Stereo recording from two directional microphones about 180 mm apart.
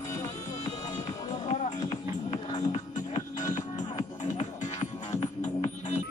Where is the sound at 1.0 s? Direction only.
40° left (ahead or behind).